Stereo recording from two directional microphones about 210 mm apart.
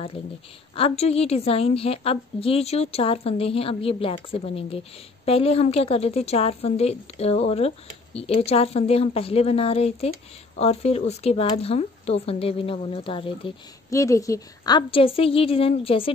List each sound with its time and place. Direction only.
0.7 s a woman's voice: 30° left (ahead or behind)
13.9 s a woman's voice: 15° left (ahead or behind)